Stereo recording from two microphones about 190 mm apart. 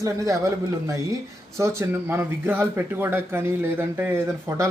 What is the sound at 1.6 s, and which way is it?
Speech, 15° right (ahead or behind).